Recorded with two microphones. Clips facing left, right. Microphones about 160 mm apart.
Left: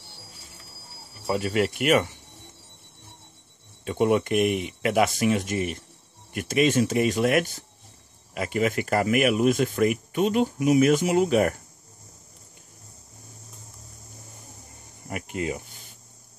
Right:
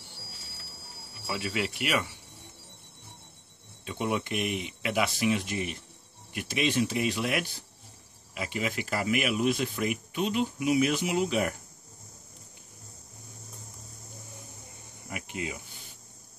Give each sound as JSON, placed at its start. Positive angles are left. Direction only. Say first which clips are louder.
{"t": 1.2, "sound": "speech", "louder": "left 8 dB", "side_deg": 45}
{"t": 3.8, "sound": "speech", "louder": "left 9 dB", "side_deg": 50}
{"t": 15.0, "sound": "a sound", "louder": "left 7 dB", "side_deg": 50}